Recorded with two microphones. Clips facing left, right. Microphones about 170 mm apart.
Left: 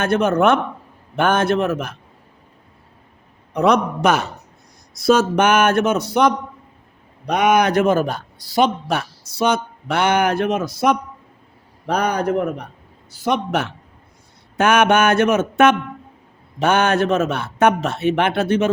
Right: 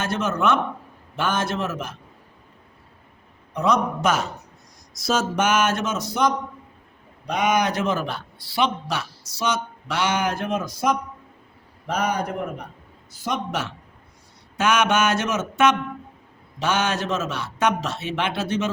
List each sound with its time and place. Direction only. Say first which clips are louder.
0.0 s a man's voice: left 7 dB; 60° left (ahead or behind)
3.5 s a man's voice: left 5 dB; 70° left (ahead or behind)